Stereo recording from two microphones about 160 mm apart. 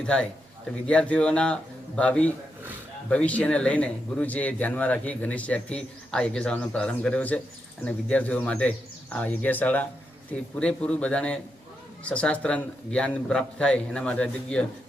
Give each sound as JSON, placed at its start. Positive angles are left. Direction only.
{"t": 0.0, "sound": "speech", "side_deg": 5}